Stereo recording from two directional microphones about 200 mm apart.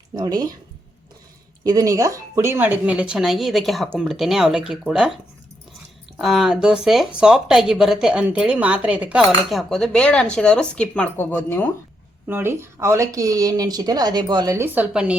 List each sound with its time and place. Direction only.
0.2 s speech: 20° right (ahead or behind)
1.6 s a woman's voice: 15° right (ahead or behind)
6.1 s a woman's voice: centre (ahead or behind)
12.3 s speech: 10° right (ahead or behind)